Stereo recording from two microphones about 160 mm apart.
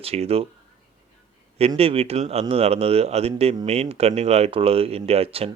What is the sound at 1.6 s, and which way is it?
A man's voice, 40° right (ahead or behind).